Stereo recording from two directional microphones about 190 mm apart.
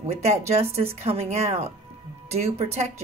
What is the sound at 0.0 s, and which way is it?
Speech, 35° right (ahead or behind).